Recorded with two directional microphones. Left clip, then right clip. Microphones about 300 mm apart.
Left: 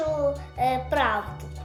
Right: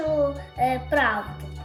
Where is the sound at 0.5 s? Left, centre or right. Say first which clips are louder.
Right 3 dB; centre.